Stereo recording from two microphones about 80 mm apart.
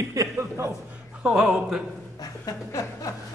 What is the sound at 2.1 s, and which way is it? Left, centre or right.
Speech, left.